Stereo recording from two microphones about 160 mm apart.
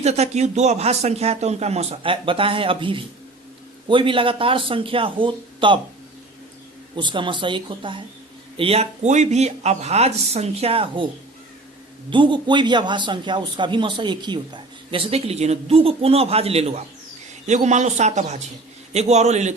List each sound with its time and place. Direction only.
0.0 s a man's voice: 45° right (ahead or behind)
6.9 s a man's voice: 30° right (ahead or behind)
12.1 s a man's voice: 30° right (ahead or behind); by 19.5 s 45° right (ahead or behind)